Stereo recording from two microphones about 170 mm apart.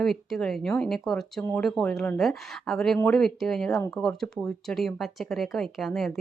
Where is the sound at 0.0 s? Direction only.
Centre (ahead or behind).